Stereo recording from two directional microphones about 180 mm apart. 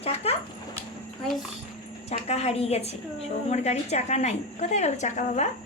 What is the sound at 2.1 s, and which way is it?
A woman's voice, 35° left (ahead or behind).